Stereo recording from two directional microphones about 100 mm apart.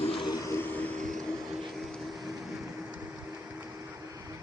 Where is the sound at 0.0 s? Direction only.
70° left (ahead or behind).